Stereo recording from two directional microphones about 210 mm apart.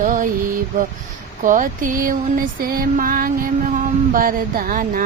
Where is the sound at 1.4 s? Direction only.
40° right (ahead or behind).